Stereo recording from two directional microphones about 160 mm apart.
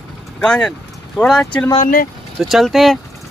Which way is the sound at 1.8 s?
60° left (ahead or behind).